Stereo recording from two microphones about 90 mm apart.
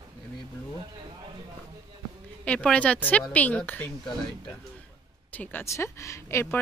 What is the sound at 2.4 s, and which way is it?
A woman's voice, 15° left (ahead or behind).